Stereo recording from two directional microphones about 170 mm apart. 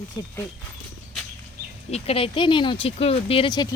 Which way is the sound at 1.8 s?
40° left (ahead or behind).